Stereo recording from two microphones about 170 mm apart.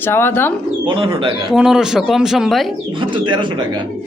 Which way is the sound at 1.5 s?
5° right (ahead or behind).